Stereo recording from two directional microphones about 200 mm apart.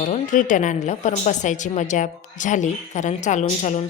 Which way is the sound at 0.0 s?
40° left (ahead or behind).